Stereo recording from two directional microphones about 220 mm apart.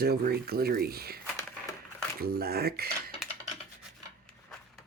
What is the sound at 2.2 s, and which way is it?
Speech, 45° right (ahead or behind).